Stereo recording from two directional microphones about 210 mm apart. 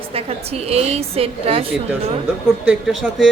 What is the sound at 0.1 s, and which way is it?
A woman's voice, 30° right (ahead or behind).